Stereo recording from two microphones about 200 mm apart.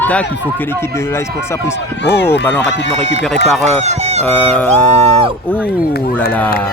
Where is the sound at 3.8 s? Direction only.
35° right (ahead or behind).